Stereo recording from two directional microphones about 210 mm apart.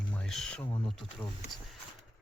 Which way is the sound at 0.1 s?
5° left (ahead or behind).